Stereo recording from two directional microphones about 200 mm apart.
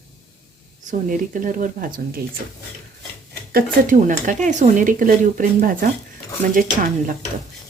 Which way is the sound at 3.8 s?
40° right (ahead or behind).